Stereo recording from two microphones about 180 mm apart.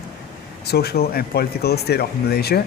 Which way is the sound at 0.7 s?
60° left (ahead or behind).